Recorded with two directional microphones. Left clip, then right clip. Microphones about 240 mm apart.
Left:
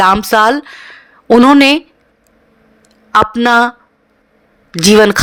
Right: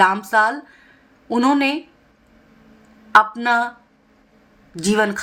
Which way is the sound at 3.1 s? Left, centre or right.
Left.